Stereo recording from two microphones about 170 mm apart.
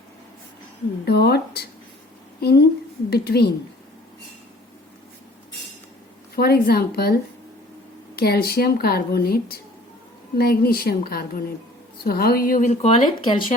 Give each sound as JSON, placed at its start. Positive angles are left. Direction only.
{"t": 1.0, "sound": "a woman's voice", "side_deg": 70}
{"t": 6.3, "sound": "a woman's voice", "side_deg": 65}
{"t": 12.9, "sound": "speech", "side_deg": 30}